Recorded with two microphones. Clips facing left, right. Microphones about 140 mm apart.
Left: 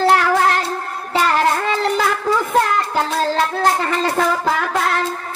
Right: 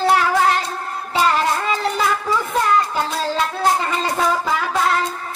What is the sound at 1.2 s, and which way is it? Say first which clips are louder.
Child singing: left 1 dB; 55° left (ahead or behind).